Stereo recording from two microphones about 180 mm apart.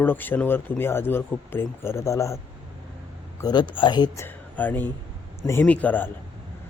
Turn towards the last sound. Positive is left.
turn(degrees=10)  # may be behind; listen again after turning